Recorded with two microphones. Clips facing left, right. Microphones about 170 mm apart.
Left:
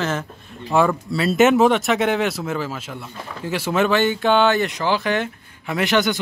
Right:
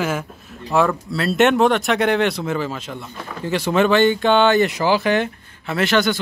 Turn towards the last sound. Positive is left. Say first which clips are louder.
# right 1 dB
turn(degrees=15)  # may be behind; listen again after turning